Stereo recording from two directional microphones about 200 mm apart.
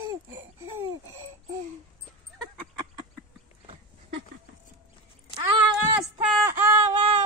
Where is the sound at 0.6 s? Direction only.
25° right (ahead or behind).